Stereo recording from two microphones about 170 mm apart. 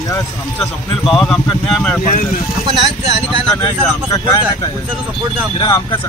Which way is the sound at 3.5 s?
20° left (ahead or behind).